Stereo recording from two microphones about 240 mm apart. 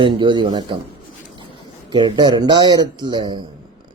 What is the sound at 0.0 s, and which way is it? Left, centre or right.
Speech, right.